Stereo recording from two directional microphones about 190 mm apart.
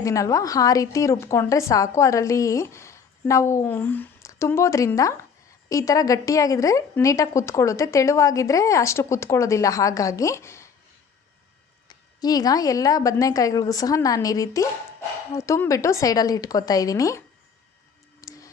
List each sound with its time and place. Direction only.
0.0 s a woman's voice: 15° left (ahead or behind)
11.9 s a woman's voice: 20° left (ahead or behind)
18.2 s tick: 15° left (ahead or behind)